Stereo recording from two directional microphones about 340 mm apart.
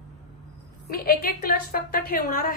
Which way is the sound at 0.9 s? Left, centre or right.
Left.